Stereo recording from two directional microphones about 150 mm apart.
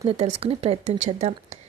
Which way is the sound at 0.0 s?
40° right (ahead or behind).